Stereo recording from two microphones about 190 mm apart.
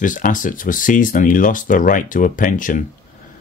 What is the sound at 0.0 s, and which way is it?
Speech, 45° left (ahead or behind).